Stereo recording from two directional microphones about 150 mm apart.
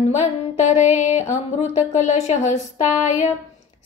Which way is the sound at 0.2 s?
50° left (ahead or behind).